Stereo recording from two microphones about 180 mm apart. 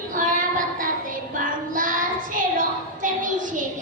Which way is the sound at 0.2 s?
50° right (ahead or behind).